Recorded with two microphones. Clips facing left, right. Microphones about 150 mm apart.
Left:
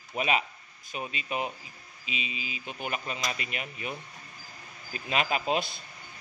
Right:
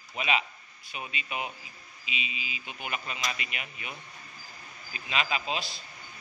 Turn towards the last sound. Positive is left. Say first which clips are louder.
# left 4 dB
turn(degrees=55)  # may be behind; listen again after turning